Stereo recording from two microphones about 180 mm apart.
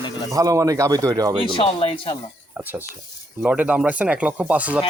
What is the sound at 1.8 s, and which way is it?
Speech, 30° left (ahead or behind).